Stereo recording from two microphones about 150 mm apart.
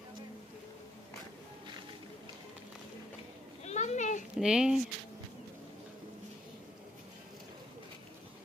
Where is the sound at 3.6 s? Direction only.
50° left (ahead or behind).